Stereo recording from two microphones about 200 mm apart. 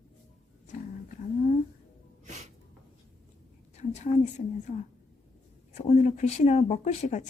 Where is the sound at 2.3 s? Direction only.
35° right (ahead or behind).